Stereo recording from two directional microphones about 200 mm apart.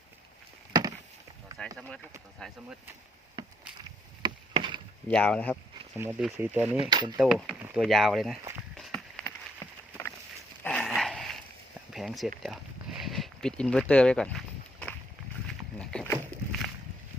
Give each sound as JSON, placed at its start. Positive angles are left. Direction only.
{"t": 0.7, "sound": "a sound", "side_deg": -20}
{"t": 1.5, "sound": "speech", "side_deg": 5}
{"t": 3.4, "sound": "chop", "side_deg": -25}
{"t": 4.2, "sound": "rowboat", "side_deg": -25}
{"t": 5.0, "sound": "speech", "side_deg": 5}
{"t": 6.0, "sound": "speech", "side_deg": -5}
{"t": 6.9, "sound": "speech", "side_deg": -20}
{"t": 7.2, "sound": "speech", "side_deg": 0}
{"t": 8.7, "sound": "run", "side_deg": 0}
{"t": 10.6, "sound": "dog", "side_deg": 5}
{"t": 11.9, "sound": "a sound", "side_deg": 0}
{"t": 15.8, "sound": "rowboat", "side_deg": 5}